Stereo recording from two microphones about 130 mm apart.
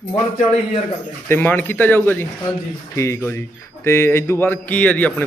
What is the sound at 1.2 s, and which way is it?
Speech, 15° left (ahead or behind).